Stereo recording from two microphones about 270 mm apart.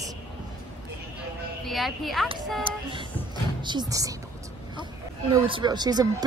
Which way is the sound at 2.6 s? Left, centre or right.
Centre.